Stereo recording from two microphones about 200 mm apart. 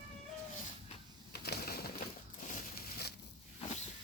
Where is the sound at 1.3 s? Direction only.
50° left (ahead or behind).